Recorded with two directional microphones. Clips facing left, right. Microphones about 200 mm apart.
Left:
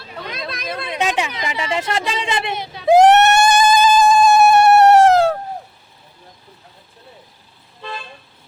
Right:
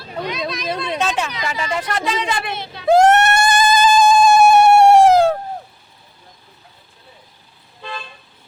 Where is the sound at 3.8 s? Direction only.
5° left (ahead or behind).